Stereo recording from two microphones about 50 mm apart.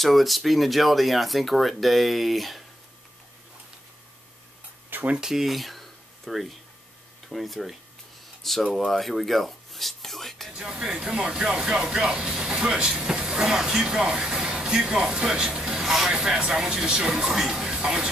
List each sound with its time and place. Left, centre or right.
0.0 s speech: centre
5.1 s speech: centre
10.5 s speech: centre
16.3 s speech: centre